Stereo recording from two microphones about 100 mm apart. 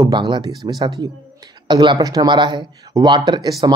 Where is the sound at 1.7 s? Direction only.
50° right (ahead or behind).